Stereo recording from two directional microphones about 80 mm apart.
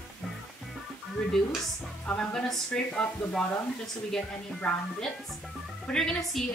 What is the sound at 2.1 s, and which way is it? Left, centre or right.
A woman's voice, centre.